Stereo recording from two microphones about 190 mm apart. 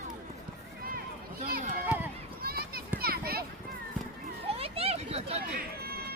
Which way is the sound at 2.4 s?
55° right (ahead or behind).